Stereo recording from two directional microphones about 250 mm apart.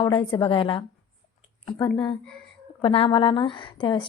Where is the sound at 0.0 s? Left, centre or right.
Centre.